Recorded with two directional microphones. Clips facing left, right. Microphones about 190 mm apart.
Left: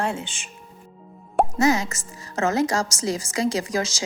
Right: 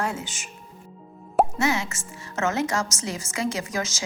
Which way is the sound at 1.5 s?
40° left (ahead or behind).